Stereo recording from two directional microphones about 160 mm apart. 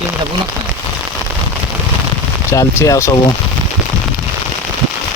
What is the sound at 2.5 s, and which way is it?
Speech, 20° left (ahead or behind).